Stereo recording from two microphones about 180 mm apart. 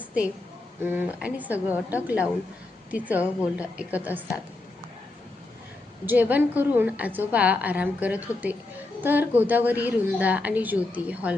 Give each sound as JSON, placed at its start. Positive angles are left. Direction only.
{"t": 0.9, "sound": "a woman's voice", "side_deg": -10}
{"t": 6.1, "sound": "a woman's voice", "side_deg": -10}